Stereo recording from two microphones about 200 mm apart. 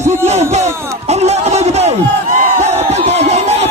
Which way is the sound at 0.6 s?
15° right (ahead or behind).